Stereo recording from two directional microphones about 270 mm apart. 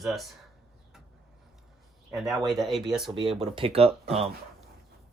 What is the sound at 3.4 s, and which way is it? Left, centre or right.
Speech, centre.